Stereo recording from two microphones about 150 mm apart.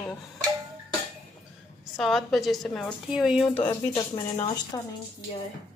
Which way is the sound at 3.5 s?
15° left (ahead or behind).